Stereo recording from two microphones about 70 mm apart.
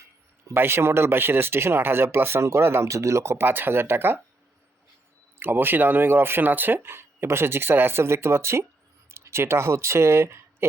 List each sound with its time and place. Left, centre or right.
0.5 s speech: right
5.4 s speech: right